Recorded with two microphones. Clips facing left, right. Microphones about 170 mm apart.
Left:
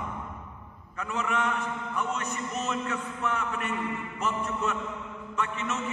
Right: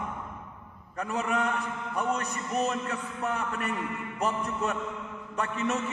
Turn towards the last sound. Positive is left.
turn(degrees=-40)  # may be behind; listen again after turning